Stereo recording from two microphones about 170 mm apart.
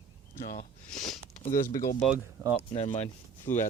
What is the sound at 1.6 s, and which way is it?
Speech, 55° left (ahead or behind).